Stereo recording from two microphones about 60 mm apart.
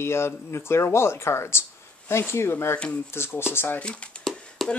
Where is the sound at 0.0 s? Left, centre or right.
Left.